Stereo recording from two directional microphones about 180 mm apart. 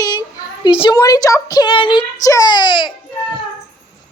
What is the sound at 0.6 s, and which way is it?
A woman's voice, 25° left (ahead or behind).